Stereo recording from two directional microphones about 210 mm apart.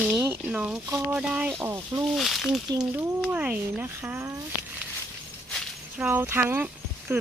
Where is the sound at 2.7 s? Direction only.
15° right (ahead or behind).